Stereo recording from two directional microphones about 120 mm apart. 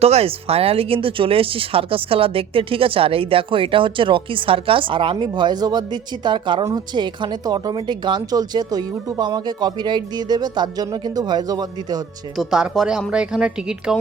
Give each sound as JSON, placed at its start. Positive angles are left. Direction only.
{"t": 0.0, "sound": "speech", "side_deg": -60}
{"t": 12.4, "sound": "a woman's voice", "side_deg": -5}